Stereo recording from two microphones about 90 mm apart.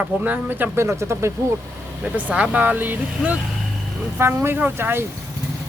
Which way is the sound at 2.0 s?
15° right (ahead or behind).